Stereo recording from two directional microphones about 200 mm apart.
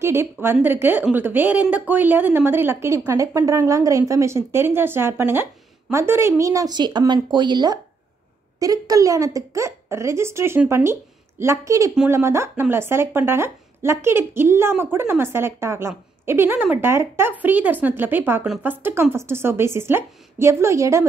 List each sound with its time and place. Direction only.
0.0 s a woman's voice: 15° right (ahead or behind)